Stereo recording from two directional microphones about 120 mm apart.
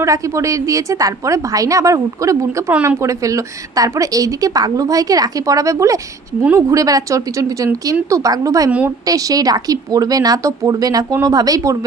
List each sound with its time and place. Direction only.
0.0 s a woman's voice: 25° right (ahead or behind)